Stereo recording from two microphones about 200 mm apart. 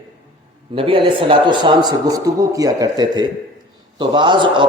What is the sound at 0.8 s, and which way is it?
A man's voice, 25° right (ahead or behind).